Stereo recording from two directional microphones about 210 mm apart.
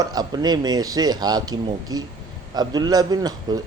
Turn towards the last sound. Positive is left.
turn(degrees=-20)  # may be behind; listen again after turning